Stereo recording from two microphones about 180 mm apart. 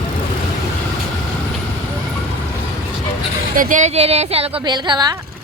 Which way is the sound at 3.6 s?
45° right (ahead or behind).